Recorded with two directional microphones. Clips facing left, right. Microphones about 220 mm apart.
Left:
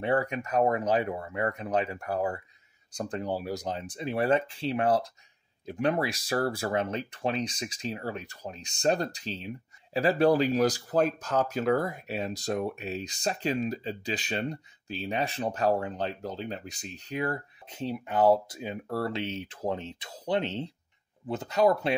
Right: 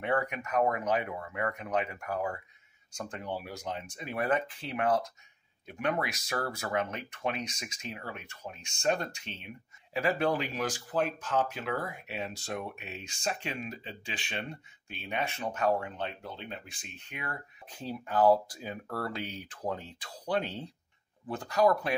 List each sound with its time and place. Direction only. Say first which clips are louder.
0.0 s speech: left 4 dB; 30° left (ahead or behind)
17.6 s speech: left 5 dB; 20° left (ahead or behind)